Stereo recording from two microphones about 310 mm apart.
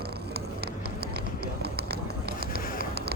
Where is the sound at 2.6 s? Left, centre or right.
Left.